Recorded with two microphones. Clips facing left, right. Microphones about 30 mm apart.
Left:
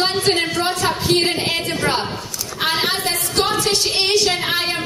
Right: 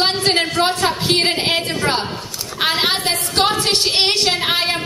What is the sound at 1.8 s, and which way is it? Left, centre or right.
Speech, centre.